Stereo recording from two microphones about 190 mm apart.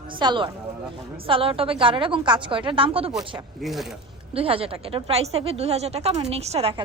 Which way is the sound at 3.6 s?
Centre (ahead or behind).